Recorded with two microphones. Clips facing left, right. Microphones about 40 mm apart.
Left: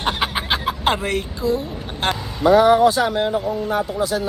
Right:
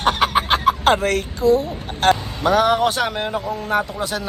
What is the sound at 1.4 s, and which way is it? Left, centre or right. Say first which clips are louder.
A man's voice: right 5 dB; right.